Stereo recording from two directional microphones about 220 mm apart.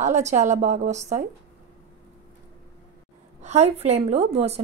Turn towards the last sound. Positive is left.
turn(degrees=-30)  # may be behind; listen again after turning